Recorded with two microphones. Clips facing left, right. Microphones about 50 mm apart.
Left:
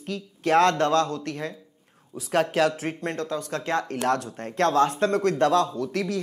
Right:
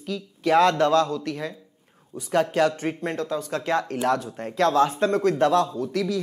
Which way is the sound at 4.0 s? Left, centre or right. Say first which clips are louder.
Right 1 dB; left.